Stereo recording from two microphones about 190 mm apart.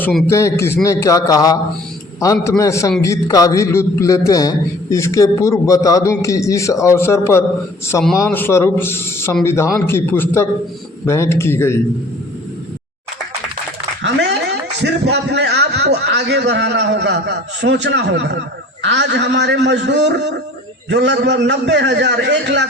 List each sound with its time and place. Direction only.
0.0 s a man's voice: centre (ahead or behind)
0.3 s a man's voice: 15° left (ahead or behind)
14.0 s a sound: 65° right (ahead or behind)
14.8 s a man's voice: 60° right (ahead or behind)